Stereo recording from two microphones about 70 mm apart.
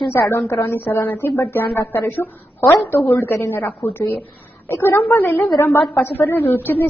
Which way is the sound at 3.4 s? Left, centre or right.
Left.